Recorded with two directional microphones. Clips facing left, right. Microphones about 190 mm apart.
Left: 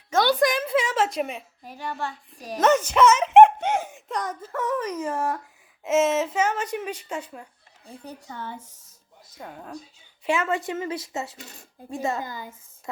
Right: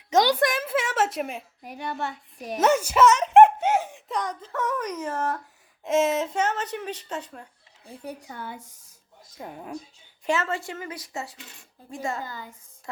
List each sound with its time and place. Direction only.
0.1 s a woman's voice: 15° right (ahead or behind)
0.3 s a woman's voice: 5° right (ahead or behind)
1.6 s a woman's voice: 15° right (ahead or behind)
2.6 s a child's voice: 10° right (ahead or behind); by 5.4 s 10° left (ahead or behind)
5.8 s speech: centre (ahead or behind)
8.0 s speech: 10° right (ahead or behind)
10.2 s a woman's voice: 15° left (ahead or behind)